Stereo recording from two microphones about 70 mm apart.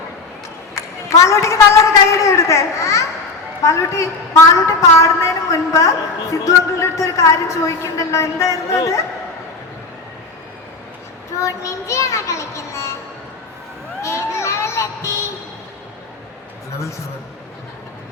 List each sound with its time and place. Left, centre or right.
0.8 s a sound: left
1.1 s a woman's voice: left
11.3 s a woman's voice: left
14.0 s music: left